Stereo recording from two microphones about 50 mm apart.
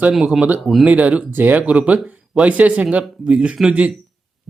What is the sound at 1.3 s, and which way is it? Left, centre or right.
Speech, right.